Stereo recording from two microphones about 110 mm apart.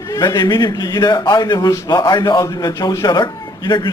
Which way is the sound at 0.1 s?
35° left (ahead or behind).